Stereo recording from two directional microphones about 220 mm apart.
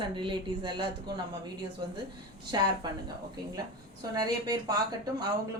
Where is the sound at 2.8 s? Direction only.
20° right (ahead or behind).